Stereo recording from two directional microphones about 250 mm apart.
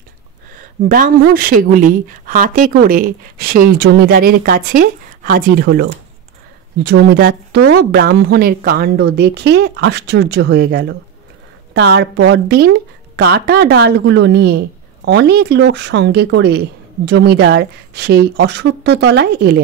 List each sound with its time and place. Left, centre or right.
0.6 s speech: right